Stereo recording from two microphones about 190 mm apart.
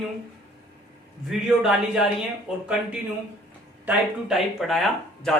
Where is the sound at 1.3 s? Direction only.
Centre (ahead or behind).